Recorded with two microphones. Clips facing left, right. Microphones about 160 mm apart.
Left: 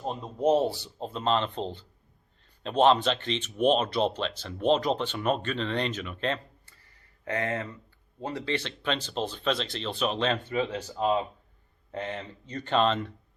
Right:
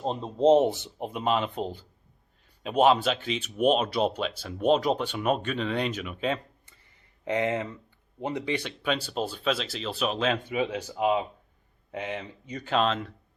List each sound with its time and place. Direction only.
0.0 s speech: 25° right (ahead or behind); by 6.4 s 10° right (ahead or behind)
6.7 s a sound: 20° right (ahead or behind)
8.2 s speech: 20° right (ahead or behind); by 13.1 s centre (ahead or behind)